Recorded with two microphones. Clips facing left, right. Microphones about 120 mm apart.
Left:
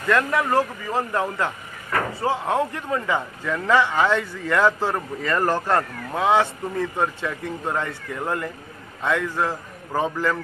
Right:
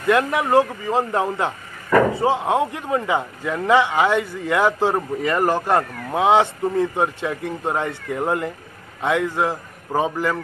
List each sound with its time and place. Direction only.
0.1 s a man's voice: 15° right (ahead or behind)